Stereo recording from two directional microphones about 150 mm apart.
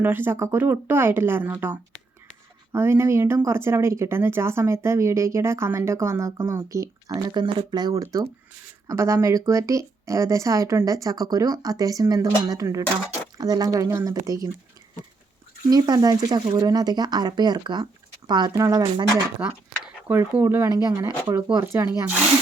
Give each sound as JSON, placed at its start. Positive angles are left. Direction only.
{"t": 0.0, "sound": "speech", "side_deg": -15}
{"t": 7.3, "sound": "speech", "side_deg": -30}
{"t": 15.7, "sound": "speech", "side_deg": -25}
{"t": 19.4, "sound": "speech", "side_deg": -10}